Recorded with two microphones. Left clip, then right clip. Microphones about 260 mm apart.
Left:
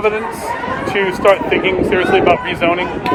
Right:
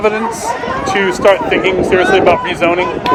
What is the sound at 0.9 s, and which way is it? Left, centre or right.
Speech, right.